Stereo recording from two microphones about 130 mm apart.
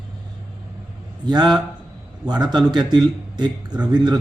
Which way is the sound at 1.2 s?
35° right (ahead or behind).